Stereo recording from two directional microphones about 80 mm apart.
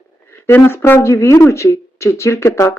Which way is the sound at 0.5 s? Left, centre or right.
Left.